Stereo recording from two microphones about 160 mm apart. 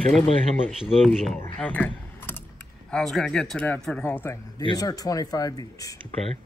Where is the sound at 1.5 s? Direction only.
10° left (ahead or behind).